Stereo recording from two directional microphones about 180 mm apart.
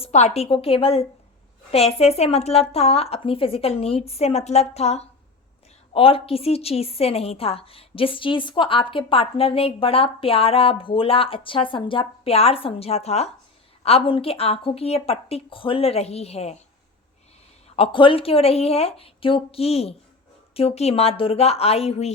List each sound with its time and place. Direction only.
0.0 s a woman's voice: 40° left (ahead or behind)
17.7 s a woman's voice: 30° left (ahead or behind)